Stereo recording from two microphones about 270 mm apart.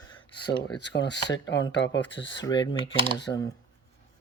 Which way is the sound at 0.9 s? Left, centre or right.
Left.